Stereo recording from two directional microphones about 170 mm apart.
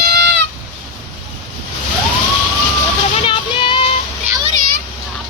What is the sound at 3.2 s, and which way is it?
Child singing, 30° left (ahead or behind).